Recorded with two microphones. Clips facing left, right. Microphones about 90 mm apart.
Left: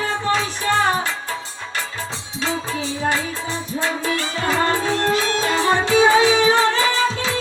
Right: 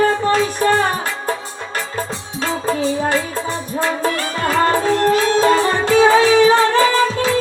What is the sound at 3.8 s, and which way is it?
Music, 45° right (ahead or behind).